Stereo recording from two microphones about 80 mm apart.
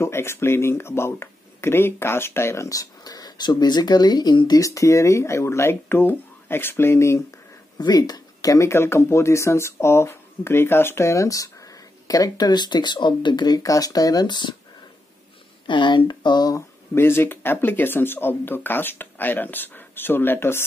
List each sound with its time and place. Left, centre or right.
0.0 s speech: left
7.8 s speech: left
15.6 s speech: left
16.5 s speech: left